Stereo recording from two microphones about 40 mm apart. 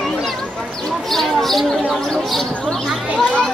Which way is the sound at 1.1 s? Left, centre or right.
Centre.